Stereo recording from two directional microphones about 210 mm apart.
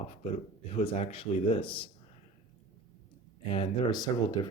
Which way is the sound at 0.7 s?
30° left (ahead or behind).